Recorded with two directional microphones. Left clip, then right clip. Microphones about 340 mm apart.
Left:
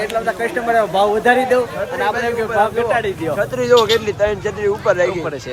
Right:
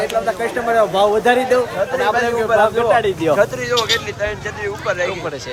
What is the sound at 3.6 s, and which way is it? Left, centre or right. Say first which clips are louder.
Speech: left 5 dB; centre.